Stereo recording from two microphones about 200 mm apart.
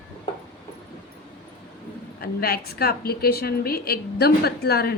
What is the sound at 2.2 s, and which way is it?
A woman's voice, 50° left (ahead or behind).